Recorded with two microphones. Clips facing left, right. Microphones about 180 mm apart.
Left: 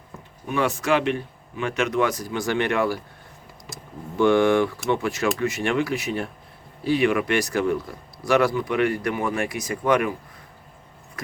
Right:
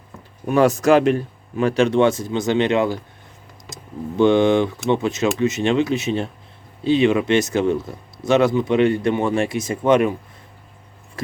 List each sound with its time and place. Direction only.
0.4 s speech: 40° right (ahead or behind); by 3.0 s 20° right (ahead or behind)
3.7 s typing: 20° right (ahead or behind)
4.2 s speech: 20° right (ahead or behind)